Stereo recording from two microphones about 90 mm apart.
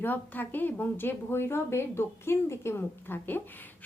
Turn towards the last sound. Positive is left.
turn(degrees=20)  # may be behind; listen again after turning